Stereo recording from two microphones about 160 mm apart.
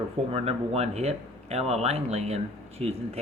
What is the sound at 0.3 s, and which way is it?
Speech, 40° right (ahead or behind).